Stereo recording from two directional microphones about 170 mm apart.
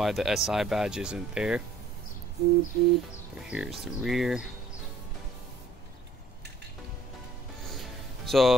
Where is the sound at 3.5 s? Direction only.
5° right (ahead or behind).